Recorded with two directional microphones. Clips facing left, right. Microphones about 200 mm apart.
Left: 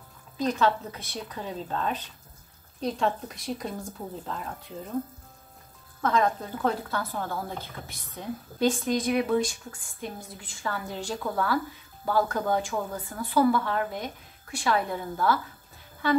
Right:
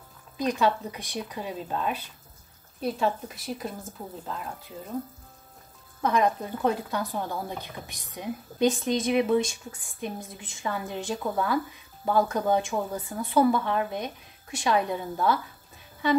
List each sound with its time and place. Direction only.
0.4 s speech: 15° right (ahead or behind)
5.9 s a woman's voice: 15° right (ahead or behind)